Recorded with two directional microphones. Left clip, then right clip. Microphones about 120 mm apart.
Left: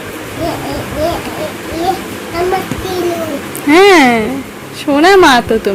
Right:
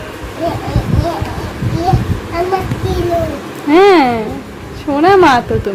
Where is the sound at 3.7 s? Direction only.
10° left (ahead or behind).